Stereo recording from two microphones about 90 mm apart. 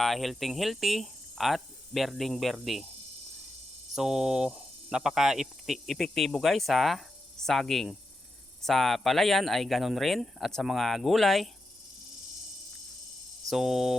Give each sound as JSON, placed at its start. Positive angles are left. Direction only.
{"t": 0.0, "sound": "speech", "side_deg": 0}
{"t": 3.9, "sound": "speech", "side_deg": -5}
{"t": 13.5, "sound": "speech", "side_deg": -5}